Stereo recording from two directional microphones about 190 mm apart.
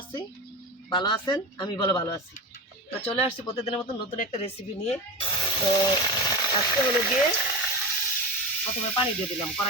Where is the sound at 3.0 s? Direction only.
30° left (ahead or behind).